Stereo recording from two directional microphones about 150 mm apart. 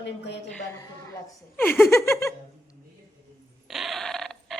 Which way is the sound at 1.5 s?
15° left (ahead or behind).